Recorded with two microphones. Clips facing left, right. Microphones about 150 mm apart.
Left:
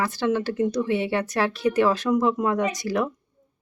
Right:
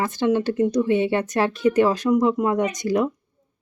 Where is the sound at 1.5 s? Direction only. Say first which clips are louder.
Right 4 dB; 45° right (ahead or behind).